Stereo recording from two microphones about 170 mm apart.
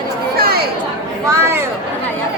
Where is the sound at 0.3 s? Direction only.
65° right (ahead or behind).